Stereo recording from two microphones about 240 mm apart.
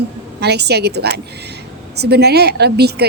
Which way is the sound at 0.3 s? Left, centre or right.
Right.